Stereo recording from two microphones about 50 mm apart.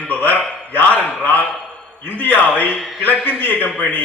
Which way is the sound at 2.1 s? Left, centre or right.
Left.